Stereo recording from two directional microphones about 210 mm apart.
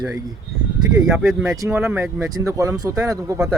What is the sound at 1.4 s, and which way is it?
Speech, 15° right (ahead or behind).